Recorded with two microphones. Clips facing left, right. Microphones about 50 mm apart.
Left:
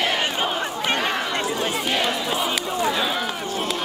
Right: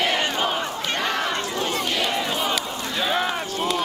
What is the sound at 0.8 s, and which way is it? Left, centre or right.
Crowd, left.